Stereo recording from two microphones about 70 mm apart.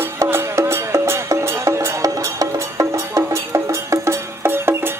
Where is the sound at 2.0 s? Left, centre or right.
Right.